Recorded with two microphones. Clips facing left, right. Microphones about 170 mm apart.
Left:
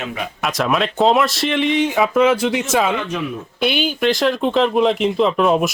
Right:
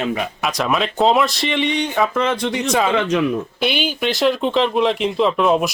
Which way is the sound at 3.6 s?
Centre (ahead or behind).